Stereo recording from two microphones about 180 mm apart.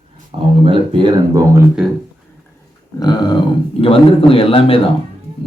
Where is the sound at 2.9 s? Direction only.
25° left (ahead or behind).